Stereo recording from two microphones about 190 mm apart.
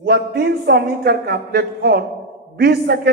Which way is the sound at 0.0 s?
55° right (ahead or behind).